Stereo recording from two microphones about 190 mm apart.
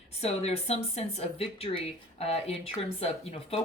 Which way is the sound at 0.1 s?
35° left (ahead or behind).